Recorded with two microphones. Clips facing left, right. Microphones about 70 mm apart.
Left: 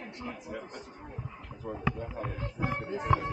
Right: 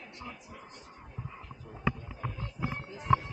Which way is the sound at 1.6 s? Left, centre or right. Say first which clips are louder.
Left 2 dB; left.